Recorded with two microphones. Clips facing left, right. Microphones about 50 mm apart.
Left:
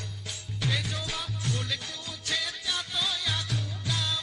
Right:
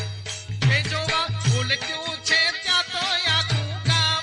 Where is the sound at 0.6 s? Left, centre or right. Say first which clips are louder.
Right 8 dB; right.